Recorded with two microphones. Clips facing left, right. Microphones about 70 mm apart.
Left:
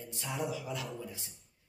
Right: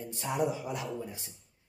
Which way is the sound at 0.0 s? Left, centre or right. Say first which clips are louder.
Right 6 dB; right.